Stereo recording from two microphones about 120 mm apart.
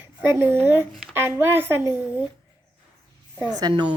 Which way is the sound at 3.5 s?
35° right (ahead or behind).